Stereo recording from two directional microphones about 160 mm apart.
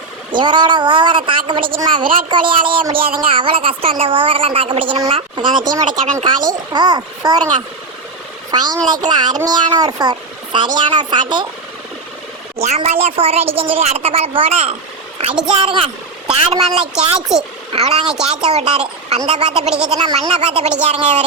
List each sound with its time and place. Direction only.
0.3 s speech: 30° right (ahead or behind)
8.4 s speech: 25° right (ahead or behind)
12.5 s speech: 40° right (ahead or behind)
15.3 s a woman's voice: 5° right (ahead or behind)
15.5 s speech: 35° right (ahead or behind)
16.8 s speech: 5° right (ahead or behind)
17.7 s speech: 40° right (ahead or behind)
18.0 s speech: 5° right (ahead or behind)
18.5 s speech: 40° right (ahead or behind)